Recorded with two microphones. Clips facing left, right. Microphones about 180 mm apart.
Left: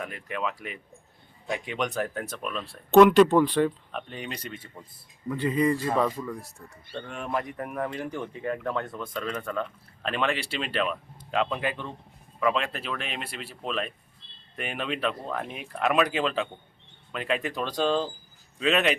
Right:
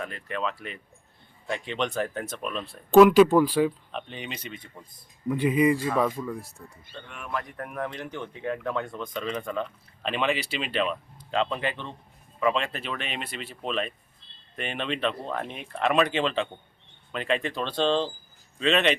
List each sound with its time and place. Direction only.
0.0 s speech: 10° left (ahead or behind)
5.3 s speech: 15° right (ahead or behind)
6.1 s speech: centre (ahead or behind)
6.9 s speech: 30° left (ahead or behind)
7.5 s speech: 5° left (ahead or behind)